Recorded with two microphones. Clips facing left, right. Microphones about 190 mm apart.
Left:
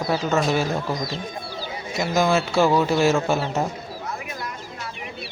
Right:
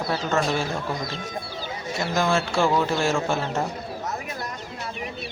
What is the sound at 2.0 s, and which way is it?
Speech, 5° left (ahead or behind).